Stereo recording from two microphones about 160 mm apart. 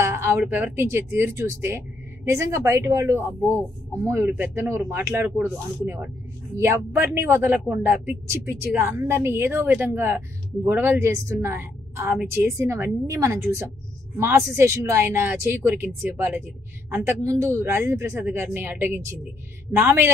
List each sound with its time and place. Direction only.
0.0 s speech: 15° right (ahead or behind)